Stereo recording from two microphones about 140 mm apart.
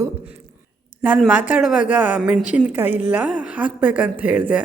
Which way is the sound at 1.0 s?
10° right (ahead or behind).